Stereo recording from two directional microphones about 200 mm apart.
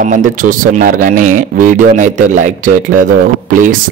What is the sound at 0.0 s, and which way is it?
Speech, 40° right (ahead or behind).